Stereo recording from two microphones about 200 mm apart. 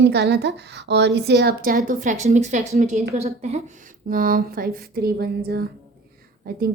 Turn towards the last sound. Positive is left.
turn(degrees=-45)  # may be behind; listen again after turning